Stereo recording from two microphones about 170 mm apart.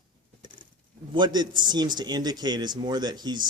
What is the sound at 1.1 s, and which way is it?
A man's voice, 25° right (ahead or behind).